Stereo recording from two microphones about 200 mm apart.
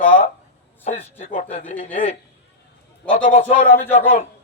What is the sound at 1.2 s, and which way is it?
A man's voice, 40° left (ahead or behind).